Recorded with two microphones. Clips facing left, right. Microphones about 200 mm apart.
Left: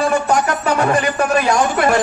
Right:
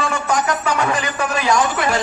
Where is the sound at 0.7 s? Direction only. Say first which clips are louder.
Left 4 dB; 55° left (ahead or behind).